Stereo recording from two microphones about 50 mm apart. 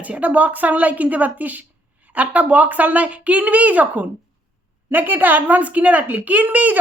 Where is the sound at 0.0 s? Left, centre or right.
Right.